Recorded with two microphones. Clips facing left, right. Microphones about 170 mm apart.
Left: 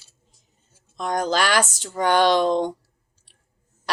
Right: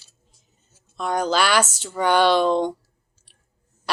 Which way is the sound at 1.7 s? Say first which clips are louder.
Even; 15° left (ahead or behind).